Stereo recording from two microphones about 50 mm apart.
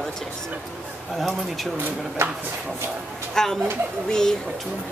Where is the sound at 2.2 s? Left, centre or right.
Right.